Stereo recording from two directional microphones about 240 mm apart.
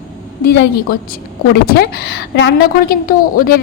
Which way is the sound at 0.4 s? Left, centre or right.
Left.